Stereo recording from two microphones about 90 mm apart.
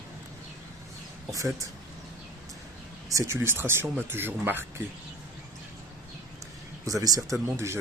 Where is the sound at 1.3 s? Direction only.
35° right (ahead or behind).